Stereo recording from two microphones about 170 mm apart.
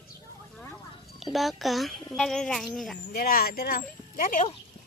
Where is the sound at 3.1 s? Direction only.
60° left (ahead or behind).